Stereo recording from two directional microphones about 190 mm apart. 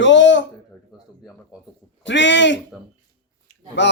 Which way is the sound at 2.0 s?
70° left (ahead or behind).